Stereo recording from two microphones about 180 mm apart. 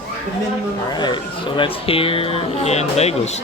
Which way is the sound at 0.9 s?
25° left (ahead or behind).